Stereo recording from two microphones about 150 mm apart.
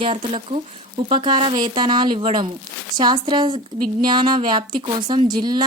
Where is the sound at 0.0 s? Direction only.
35° right (ahead or behind).